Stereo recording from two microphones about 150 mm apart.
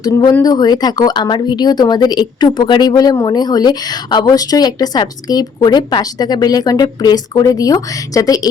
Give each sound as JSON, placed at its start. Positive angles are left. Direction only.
{"t": 0.0, "sound": "speech", "side_deg": 25}